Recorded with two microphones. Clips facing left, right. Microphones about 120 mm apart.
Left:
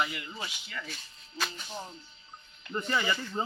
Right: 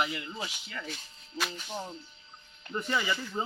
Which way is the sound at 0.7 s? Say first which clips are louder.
Right 1 dB; 25° right (ahead or behind).